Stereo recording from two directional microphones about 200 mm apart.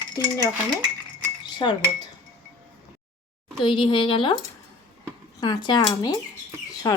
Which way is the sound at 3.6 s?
25° left (ahead or behind).